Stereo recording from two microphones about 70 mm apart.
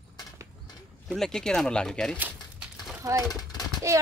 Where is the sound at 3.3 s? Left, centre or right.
Left.